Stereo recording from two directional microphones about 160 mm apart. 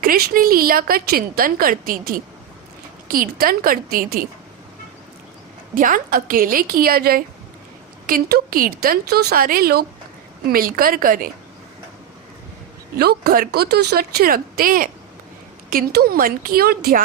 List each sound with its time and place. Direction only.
0.0 s a woman's voice: 65° right (ahead or behind)
5.7 s a woman's voice: 55° right (ahead or behind)
13.0 s a woman's voice: 75° right (ahead or behind)